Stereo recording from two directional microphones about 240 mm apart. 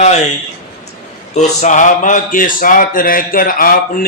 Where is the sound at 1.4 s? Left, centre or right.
Left.